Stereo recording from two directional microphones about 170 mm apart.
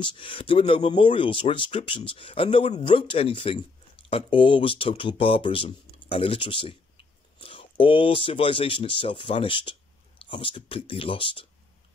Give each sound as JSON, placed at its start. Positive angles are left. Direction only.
{"t": 0.0, "sound": "speech", "side_deg": 30}